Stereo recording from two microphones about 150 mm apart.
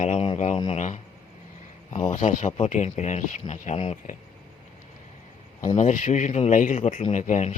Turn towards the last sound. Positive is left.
turn(degrees=50)  # may be behind; listen again after turning